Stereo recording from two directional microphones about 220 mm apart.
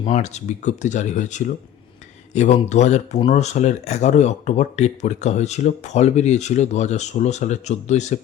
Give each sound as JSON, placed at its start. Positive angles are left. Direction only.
{"t": 0.0, "sound": "speech", "side_deg": 30}